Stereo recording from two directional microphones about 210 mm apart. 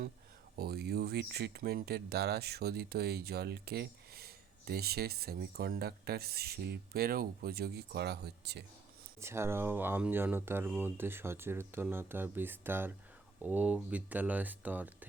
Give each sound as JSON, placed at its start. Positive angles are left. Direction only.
{"t": 0.5, "sound": "speech", "side_deg": -50}
{"t": 9.2, "sound": "speech", "side_deg": -10}